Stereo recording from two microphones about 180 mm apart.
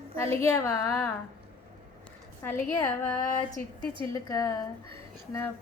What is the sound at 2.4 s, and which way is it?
Speech, 10° left (ahead or behind).